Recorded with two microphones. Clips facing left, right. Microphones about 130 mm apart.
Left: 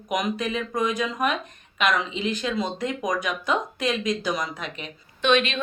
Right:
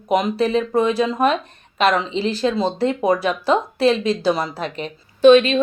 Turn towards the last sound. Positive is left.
turn(degrees=-35)  # may be behind; listen again after turning